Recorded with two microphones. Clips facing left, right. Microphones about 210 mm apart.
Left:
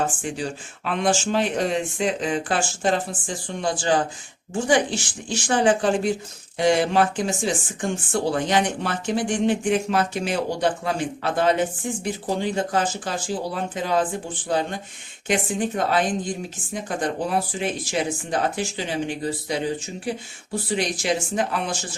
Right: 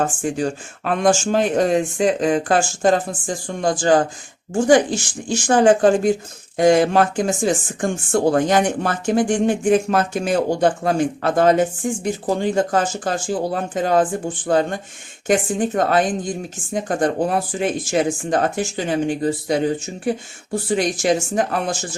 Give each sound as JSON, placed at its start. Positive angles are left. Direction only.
{"t": 0.0, "sound": "speech", "side_deg": -45}